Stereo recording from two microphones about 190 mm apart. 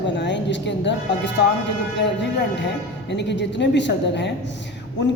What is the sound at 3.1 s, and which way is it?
Speech, 65° left (ahead or behind).